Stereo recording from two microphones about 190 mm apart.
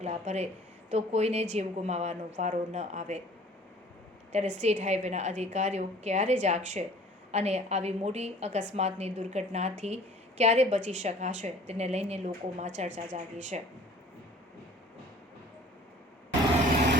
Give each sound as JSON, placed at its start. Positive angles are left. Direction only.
{"t": 0.0, "sound": "a woman's voice", "side_deg": -35}
{"t": 4.3, "sound": "a woman's voice", "side_deg": -40}
{"t": 16.7, "sound": "vehicle", "side_deg": -60}